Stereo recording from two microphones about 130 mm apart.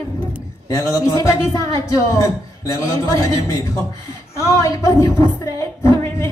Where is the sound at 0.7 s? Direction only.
25° left (ahead or behind).